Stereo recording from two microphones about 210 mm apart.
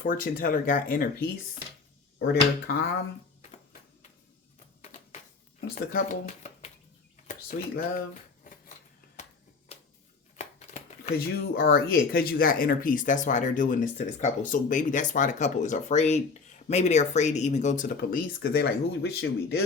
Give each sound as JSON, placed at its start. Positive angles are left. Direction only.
{"t": 0.1, "sound": "speech", "side_deg": 40}
{"t": 2.1, "sound": "speech", "side_deg": 50}
{"t": 5.5, "sound": "speech", "side_deg": 45}
{"t": 7.5, "sound": "speech", "side_deg": 40}
{"t": 10.3, "sound": "a sound", "side_deg": 30}
{"t": 11.3, "sound": "speech", "side_deg": 45}